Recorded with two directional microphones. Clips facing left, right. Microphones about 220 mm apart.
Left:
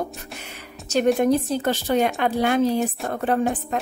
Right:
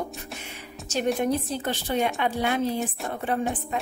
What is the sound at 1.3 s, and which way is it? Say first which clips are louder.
A woman's voice: left 6 dB; 40° left (ahead or behind).